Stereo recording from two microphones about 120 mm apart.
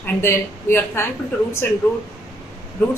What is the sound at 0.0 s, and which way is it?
A woman's voice, 20° left (ahead or behind).